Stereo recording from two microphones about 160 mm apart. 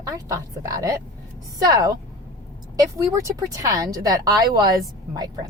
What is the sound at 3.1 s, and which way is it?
A woman's voice, 20° right (ahead or behind).